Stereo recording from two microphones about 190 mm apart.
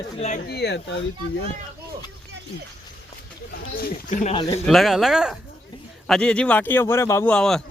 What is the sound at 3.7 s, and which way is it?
Speech, 45° left (ahead or behind).